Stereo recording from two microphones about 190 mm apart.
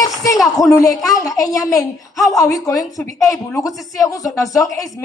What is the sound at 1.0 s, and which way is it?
A woman's voice, 20° left (ahead or behind).